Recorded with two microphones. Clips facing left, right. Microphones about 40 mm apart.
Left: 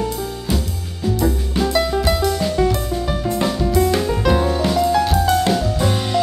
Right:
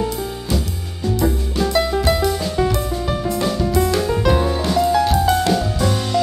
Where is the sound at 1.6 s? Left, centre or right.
Centre.